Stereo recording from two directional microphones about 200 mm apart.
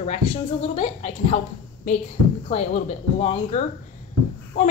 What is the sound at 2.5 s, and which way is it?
A woman's voice, 30° left (ahead or behind).